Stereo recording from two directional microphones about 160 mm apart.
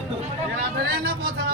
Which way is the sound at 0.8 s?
75° right (ahead or behind).